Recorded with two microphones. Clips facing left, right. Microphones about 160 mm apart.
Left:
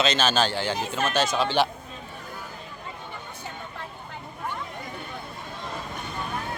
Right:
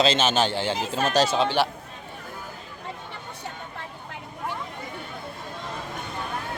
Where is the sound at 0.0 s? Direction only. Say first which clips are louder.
Right 2 dB; 25° right (ahead or behind).